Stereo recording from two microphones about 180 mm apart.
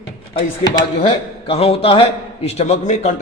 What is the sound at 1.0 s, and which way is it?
A man's voice, 30° left (ahead or behind).